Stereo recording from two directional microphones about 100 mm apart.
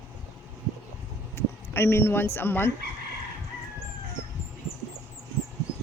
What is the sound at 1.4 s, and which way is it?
Speech, 25° left (ahead or behind).